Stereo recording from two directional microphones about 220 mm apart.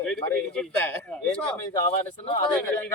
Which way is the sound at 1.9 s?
25° left (ahead or behind).